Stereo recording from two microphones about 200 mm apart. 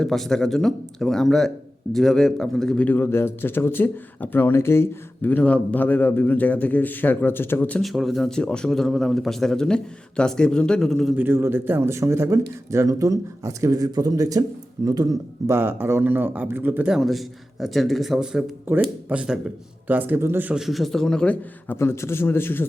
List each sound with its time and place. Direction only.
0.0 s speech: centre (ahead or behind)
11.2 s a man's voice: 10° right (ahead or behind); by 22.6 s 10° left (ahead or behind)